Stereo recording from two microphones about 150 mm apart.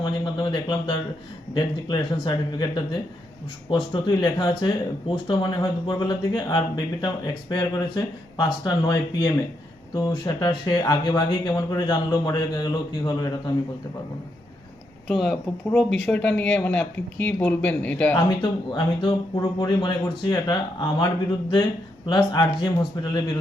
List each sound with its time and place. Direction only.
0.0 s speech: 30° left (ahead or behind)
15.0 s speech: centre (ahead or behind)
18.7 s speech: 30° left (ahead or behind)